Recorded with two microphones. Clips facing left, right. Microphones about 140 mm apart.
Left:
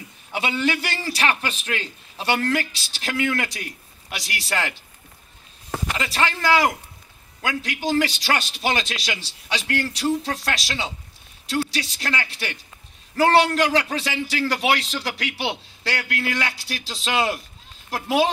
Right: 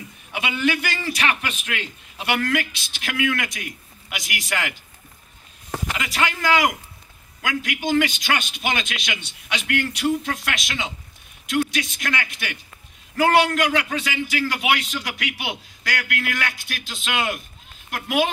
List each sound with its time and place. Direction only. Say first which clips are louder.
0.3 s a man's voice: even; 30° left (ahead or behind)
5.9 s a man's voice: left 1 dB; 35° left (ahead or behind)